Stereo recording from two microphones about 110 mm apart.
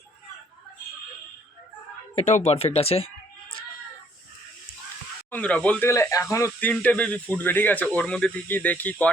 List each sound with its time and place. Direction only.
2.1 s speech: 80° left; by 3.1 s 65° left (ahead or behind)
5.3 s speech: 10° left (ahead or behind)
5.8 s a man's voice: 25° left (ahead or behind)
6.6 s speech: 15° left (ahead or behind)